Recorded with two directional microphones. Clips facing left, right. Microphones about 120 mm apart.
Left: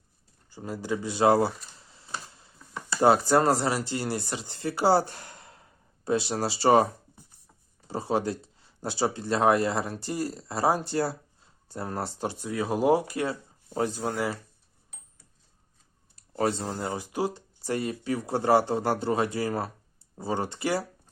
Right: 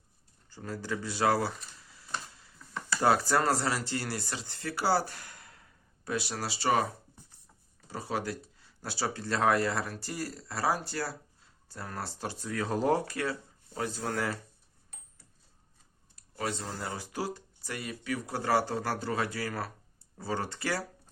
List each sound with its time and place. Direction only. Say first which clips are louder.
0.5 s speech: left 5 dB; 15° left (ahead or behind)
1.7 s a sound: even; 30° left (ahead or behind)
2.9 s speech: left 5 dB; 20° left (ahead or behind)
7.9 s speech: left 7 dB; 25° left (ahead or behind)
16.1 s speech: left 8 dB; 30° left (ahead or behind)
17.6 s speech: left 13 dB; 30° left (ahead or behind)